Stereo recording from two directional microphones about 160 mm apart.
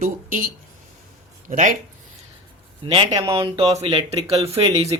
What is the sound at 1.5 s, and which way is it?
Speech, 55° right (ahead or behind).